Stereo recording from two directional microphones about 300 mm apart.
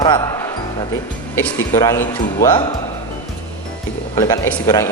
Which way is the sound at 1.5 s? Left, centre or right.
Centre.